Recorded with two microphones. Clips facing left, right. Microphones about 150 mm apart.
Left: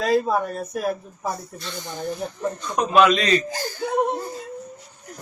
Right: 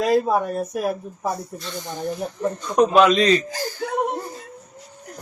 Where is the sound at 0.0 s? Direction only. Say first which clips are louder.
Right 2 dB; 10° right (ahead or behind).